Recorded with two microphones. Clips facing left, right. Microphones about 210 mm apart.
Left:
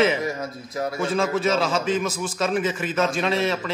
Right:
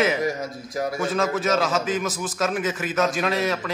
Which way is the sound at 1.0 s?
Centre (ahead or behind).